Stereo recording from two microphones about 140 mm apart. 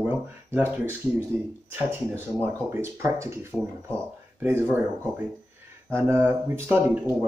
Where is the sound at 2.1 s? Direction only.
15° right (ahead or behind).